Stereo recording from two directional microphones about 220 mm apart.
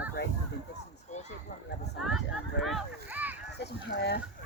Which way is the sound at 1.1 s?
30° left (ahead or behind).